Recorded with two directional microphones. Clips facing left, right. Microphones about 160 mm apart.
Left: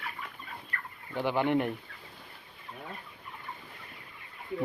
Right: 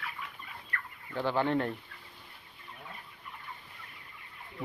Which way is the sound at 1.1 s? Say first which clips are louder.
Left 2 dB; 15° left (ahead or behind).